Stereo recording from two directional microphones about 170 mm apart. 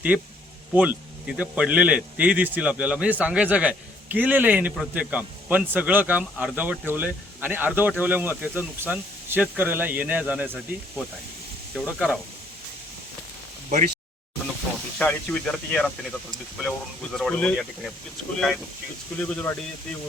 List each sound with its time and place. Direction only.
0.7 s speech: 10° right (ahead or behind)
11.7 s speech: centre (ahead or behind)
13.7 s speech: 45° right (ahead or behind)
14.9 s speech: 5° left (ahead or behind)